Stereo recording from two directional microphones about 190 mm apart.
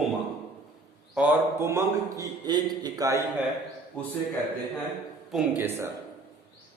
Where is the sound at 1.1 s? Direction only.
10° right (ahead or behind).